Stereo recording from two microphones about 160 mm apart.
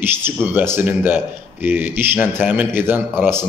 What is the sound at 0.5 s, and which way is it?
Speech, 15° right (ahead or behind).